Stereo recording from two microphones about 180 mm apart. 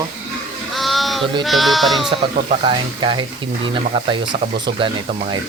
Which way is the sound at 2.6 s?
25° right (ahead or behind).